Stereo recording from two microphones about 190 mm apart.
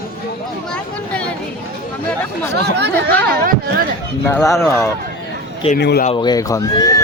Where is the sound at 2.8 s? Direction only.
55° right (ahead or behind).